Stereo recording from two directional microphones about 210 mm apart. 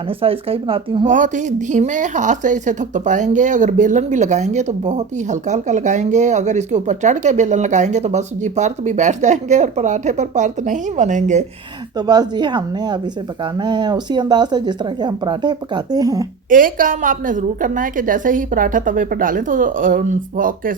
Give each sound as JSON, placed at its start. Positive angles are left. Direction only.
{"t": 0.2, "sound": "a woman's voice", "side_deg": -25}
{"t": 1.0, "sound": "a woman's voice", "side_deg": -35}
{"t": 11.9, "sound": "a woman's voice", "side_deg": -20}
{"t": 16.5, "sound": "a woman's voice", "side_deg": -40}